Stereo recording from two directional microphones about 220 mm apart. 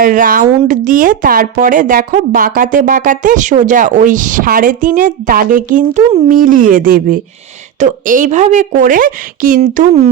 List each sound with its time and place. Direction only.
0.0 s a woman's voice: 40° right (ahead or behind)